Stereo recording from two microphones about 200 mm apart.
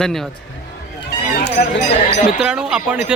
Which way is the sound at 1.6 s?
45° left (ahead or behind).